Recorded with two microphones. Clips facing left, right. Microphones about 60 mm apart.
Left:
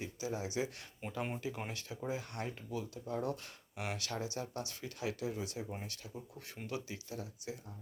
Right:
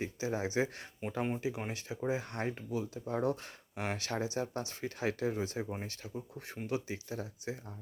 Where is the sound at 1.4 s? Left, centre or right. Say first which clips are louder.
Right 4 dB; centre.